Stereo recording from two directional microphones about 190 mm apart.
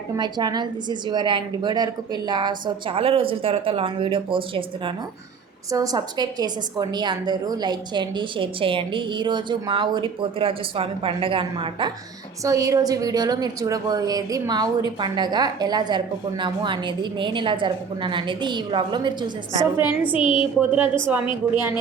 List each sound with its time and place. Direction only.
0.2 s a woman's voice: 20° right (ahead or behind)
19.8 s a woman's voice: 25° left (ahead or behind)
20.6 s a woman's voice: 10° right (ahead or behind)